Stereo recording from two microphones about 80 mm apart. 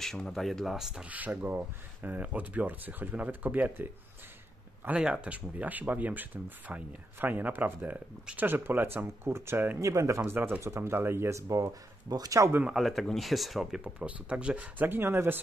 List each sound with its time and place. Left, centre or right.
0.0 s speech: centre
1.0 s speech: centre
4.8 s speech: centre; by 9.8 s right
9.8 s speech: right
12.6 s speech: centre; by 15.4 s right